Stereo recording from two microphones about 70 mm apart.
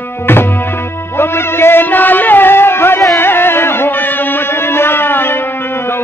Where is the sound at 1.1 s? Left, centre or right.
Left.